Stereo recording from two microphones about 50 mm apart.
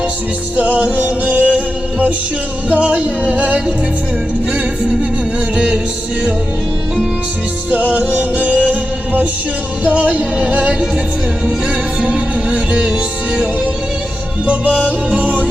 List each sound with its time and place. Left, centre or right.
0.5 s music: right
7.7 s music: right
11.9 s music: centre
14.4 s music: right